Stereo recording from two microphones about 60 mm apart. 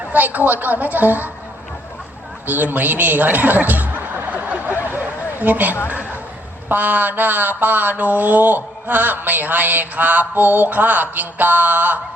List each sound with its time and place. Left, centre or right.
0.1 s a woman's voice: right
2.5 s chuckle: right
6.7 s a sound: right